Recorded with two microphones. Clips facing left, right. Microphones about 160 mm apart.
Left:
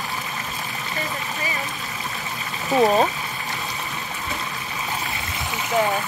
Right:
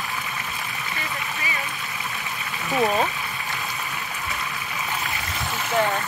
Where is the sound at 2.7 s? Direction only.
30° left (ahead or behind).